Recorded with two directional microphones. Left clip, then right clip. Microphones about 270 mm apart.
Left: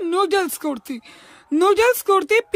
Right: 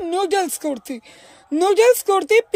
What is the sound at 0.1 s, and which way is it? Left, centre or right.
Speech, centre.